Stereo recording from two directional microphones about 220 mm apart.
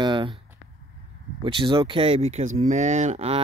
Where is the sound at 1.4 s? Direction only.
20° right (ahead or behind).